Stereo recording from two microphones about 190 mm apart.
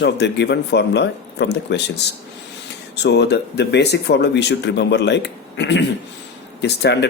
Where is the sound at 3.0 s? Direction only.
65° left (ahead or behind).